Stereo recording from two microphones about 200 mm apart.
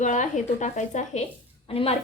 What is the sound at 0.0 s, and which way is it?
A woman's voice, 40° left (ahead or behind).